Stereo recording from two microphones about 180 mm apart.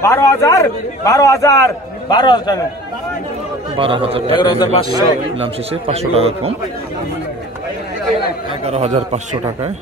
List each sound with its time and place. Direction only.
0.0 s a man's voice: 15° left (ahead or behind)
3.7 s a man's voice: 30° right (ahead or behind)
4.4 s a man's voice: 25° left (ahead or behind)
4.9 s a man's voice: 30° right (ahead or behind)
8.2 s a man's voice: 35° right (ahead or behind)